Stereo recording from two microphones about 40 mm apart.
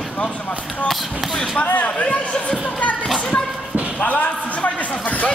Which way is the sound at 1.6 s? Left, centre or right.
Left.